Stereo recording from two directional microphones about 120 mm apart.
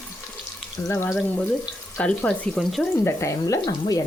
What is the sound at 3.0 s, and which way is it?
Speech, 25° left (ahead or behind).